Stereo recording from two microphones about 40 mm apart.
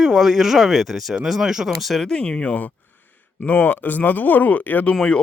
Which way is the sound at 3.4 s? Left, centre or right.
Left.